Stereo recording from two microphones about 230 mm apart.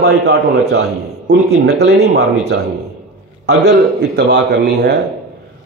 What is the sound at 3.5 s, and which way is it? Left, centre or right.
Speech, right.